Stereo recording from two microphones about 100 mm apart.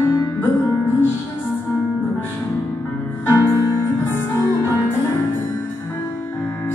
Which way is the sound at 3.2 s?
25° left (ahead or behind).